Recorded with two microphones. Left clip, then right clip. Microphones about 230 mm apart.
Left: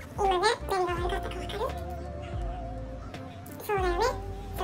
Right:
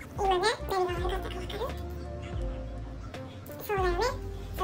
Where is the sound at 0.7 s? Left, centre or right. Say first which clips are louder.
Left 1 dB; right.